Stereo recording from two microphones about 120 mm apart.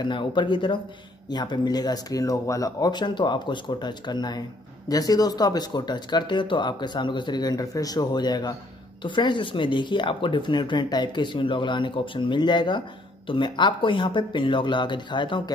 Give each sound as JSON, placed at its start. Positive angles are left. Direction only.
{"t": 0.0, "sound": "speech", "side_deg": 40}